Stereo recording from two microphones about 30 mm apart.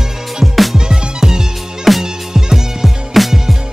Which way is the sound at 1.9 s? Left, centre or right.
Centre.